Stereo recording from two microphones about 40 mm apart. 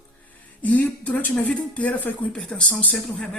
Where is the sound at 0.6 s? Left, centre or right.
Left.